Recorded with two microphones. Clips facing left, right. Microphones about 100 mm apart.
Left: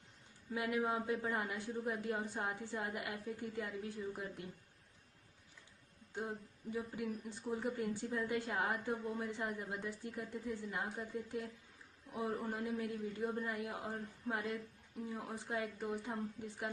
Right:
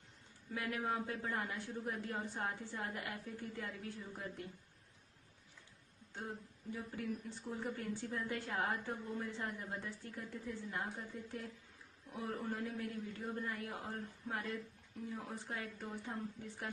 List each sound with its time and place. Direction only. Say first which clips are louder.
0.6 s a woman's voice: left 3 dB; 20° left (ahead or behind)
6.7 s a woman's voice: left 2 dB; 15° left (ahead or behind)